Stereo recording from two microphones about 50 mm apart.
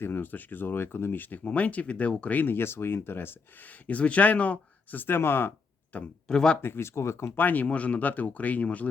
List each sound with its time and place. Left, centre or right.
0.0 s speech: left
2.4 s speech: left
3.8 s speech: left
6.2 s speech: centre
6.6 s speech: left
7.3 s speech: left